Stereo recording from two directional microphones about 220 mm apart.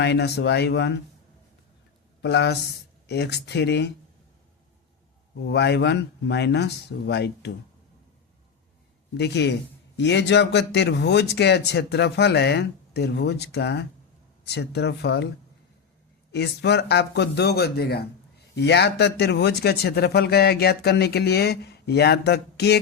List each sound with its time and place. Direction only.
0.0 s speech: 50° left (ahead or behind)
2.2 s speech: 50° left (ahead or behind)
5.5 s speech: 50° left (ahead or behind)
9.1 s speech: 50° left (ahead or behind)
16.3 s speech: 50° left (ahead or behind)